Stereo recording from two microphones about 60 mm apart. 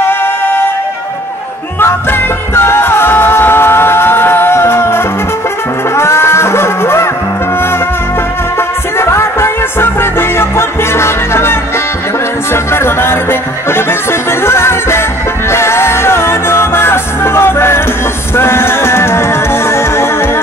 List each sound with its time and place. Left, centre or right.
0.0 s music: left
1.8 s music: left
8.5 s music: left
12.5 s music: left